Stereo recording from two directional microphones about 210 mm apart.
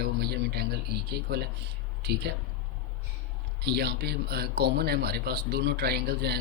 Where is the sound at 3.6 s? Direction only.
50° right (ahead or behind).